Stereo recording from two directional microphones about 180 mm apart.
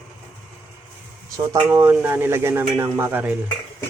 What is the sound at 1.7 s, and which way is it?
Speech, 10° right (ahead or behind).